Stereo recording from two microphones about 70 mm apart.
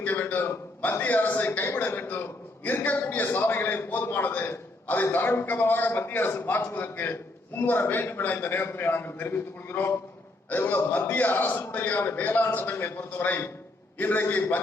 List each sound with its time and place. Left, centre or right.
0.0 s a man's voice: left
12.7 s a man's voice: left